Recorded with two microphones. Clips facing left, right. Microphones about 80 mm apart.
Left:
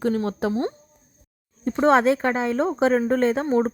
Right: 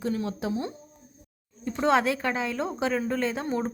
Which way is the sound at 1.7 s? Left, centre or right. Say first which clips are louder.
Left 6 dB; left.